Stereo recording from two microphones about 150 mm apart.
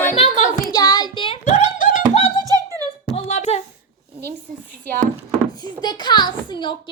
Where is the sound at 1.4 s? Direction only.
55° left (ahead or behind).